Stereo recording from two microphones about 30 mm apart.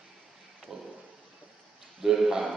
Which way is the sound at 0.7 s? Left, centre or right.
Centre.